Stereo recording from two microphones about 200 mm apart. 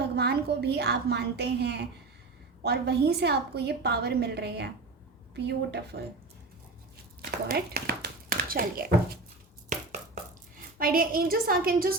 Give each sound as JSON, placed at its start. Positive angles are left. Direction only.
{"t": 0.0, "sound": "a woman's voice", "side_deg": -55}
{"t": 7.2, "sound": "speech", "side_deg": -50}
{"t": 10.8, "sound": "a woman's voice", "side_deg": -45}